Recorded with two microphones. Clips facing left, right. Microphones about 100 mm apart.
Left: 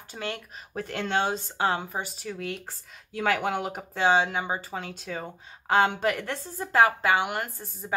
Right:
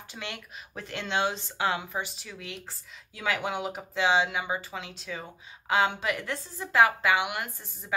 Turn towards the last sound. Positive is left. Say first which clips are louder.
# left 2 dB
turn(degrees=40)  # may be behind; listen again after turning